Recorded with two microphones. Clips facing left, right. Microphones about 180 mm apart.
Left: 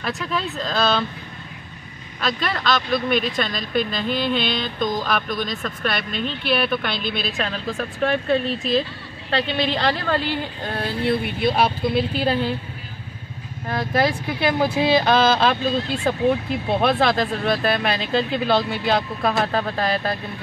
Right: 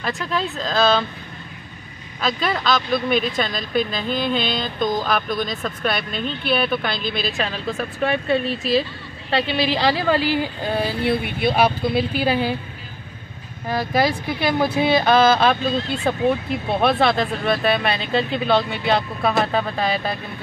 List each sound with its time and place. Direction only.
0.0 s speech: centre (ahead or behind)
2.1 s speech: centre (ahead or behind)
13.7 s speech: 5° right (ahead or behind)
16.8 s speech: centre (ahead or behind)